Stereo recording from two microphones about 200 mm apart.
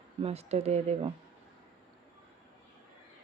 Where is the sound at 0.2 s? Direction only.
30° right (ahead or behind).